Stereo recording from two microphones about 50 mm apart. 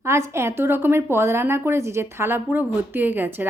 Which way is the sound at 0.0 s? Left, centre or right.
Right.